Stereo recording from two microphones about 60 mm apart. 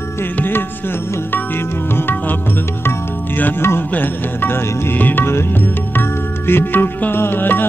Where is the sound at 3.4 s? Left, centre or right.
Left.